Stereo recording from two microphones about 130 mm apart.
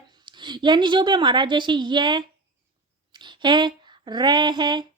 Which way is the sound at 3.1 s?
35° right (ahead or behind).